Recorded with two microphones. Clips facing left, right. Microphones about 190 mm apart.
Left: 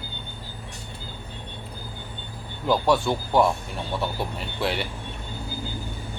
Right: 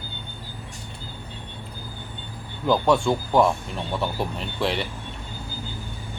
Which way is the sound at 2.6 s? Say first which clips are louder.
Right 2 dB; centre (ahead or behind).